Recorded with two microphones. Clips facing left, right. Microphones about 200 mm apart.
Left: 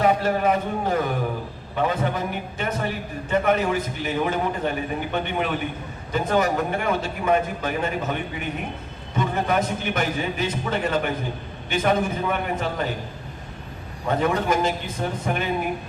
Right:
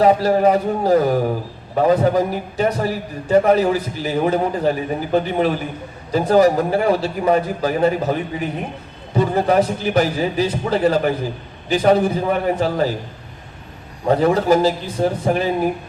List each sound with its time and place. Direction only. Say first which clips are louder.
0.0 s a man's voice: right 6 dB; 35° right (ahead or behind)
14.1 s a man's voice: right 7 dB; 35° right (ahead or behind)